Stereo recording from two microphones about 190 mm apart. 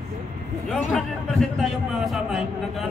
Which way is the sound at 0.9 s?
Centre (ahead or behind).